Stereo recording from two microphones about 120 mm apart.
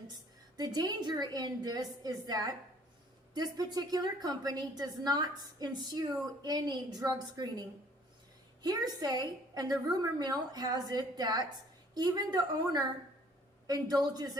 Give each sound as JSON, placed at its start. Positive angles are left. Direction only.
{"t": 0.5, "sound": "a woman's voice", "side_deg": -35}
{"t": 8.6, "sound": "a woman's voice", "side_deg": -35}